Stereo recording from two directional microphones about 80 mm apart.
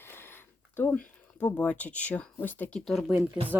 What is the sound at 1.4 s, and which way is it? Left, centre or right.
Speech, centre.